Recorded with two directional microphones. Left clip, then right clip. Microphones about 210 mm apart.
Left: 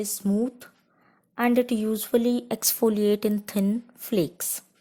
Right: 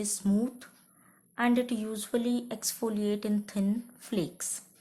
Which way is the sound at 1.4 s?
35° left (ahead or behind).